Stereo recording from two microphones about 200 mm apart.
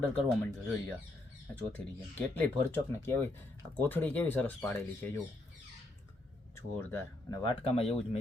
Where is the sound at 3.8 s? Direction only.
10° left (ahead or behind).